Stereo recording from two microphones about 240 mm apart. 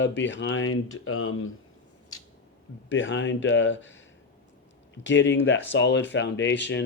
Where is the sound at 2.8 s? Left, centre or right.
Left.